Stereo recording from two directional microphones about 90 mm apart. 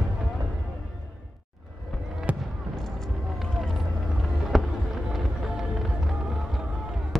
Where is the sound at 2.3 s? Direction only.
15° right (ahead or behind).